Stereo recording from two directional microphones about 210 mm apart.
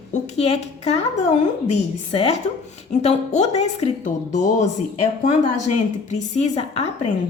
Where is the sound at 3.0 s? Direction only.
30° left (ahead or behind).